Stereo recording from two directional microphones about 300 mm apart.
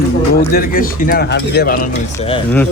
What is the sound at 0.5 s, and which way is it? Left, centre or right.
Speech, left.